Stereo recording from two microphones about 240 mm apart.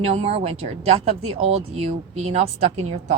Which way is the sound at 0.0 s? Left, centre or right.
Right.